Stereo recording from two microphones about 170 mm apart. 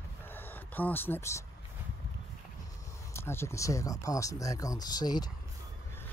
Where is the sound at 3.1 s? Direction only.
15° left (ahead or behind).